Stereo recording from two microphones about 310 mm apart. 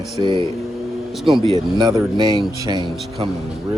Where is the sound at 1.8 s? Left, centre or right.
Centre.